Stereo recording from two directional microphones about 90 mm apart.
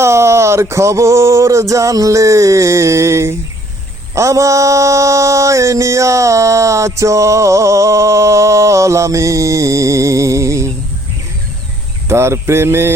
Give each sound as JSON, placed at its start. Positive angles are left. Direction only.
{"t": 0.0, "sound": "mantra", "side_deg": -30}
{"t": 12.0, "sound": "mantra", "side_deg": -30}